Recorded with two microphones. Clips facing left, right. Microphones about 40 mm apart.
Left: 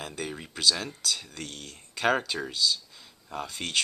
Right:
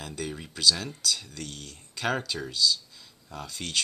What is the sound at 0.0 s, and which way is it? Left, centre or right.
Speech, centre.